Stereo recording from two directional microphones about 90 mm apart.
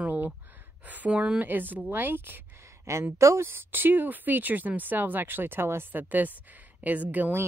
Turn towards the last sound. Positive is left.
turn(degrees=-20)  # may be behind; listen again after turning